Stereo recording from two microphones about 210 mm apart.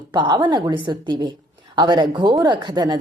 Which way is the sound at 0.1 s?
20° right (ahead or behind).